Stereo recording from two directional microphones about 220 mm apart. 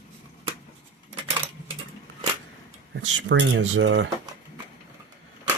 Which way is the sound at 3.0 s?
60° right (ahead or behind).